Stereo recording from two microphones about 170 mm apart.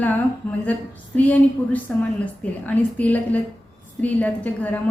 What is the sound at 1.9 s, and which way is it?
A woman's voice, 5° left (ahead or behind).